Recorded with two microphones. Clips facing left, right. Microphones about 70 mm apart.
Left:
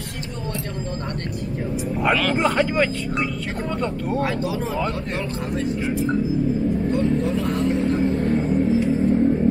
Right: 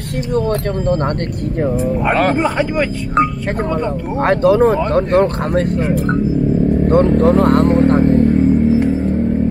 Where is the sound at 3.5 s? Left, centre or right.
Right.